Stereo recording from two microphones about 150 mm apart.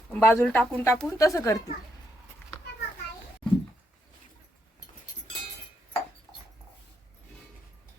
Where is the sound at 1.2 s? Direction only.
20° left (ahead or behind).